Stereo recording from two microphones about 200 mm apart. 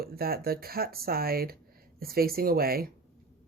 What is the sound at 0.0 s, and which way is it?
Speech, 50° right (ahead or behind).